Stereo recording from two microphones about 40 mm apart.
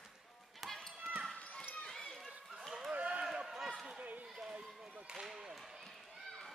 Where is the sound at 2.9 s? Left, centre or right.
Right.